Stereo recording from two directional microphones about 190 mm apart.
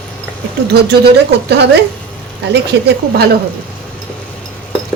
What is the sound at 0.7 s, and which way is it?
Speech, 60° right (ahead or behind).